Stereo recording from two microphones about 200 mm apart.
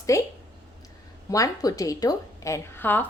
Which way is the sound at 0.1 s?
15° left (ahead or behind).